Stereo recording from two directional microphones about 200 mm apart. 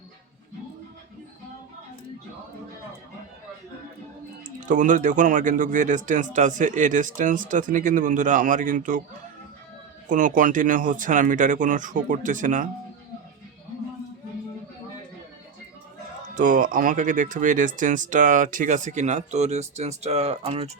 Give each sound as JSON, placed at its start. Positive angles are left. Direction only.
{"t": 4.6, "sound": "speech", "side_deg": -40}
{"t": 10.1, "sound": "speech", "side_deg": -40}
{"t": 16.3, "sound": "speech", "side_deg": -40}